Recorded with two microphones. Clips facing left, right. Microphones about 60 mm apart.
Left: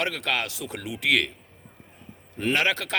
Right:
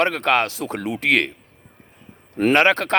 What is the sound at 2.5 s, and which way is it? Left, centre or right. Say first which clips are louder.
Speech: right 8 dB; right.